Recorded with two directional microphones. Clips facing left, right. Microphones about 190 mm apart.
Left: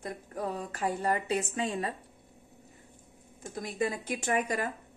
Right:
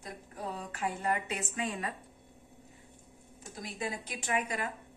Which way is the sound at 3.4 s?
50° left (ahead or behind).